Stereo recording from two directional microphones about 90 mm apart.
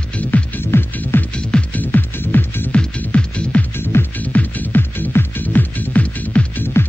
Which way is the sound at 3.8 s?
25° left (ahead or behind).